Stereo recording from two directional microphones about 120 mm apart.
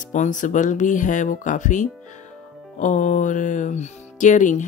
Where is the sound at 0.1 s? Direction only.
90° left.